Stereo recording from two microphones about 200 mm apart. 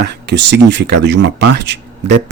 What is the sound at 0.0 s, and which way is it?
Speech, 60° right (ahead or behind).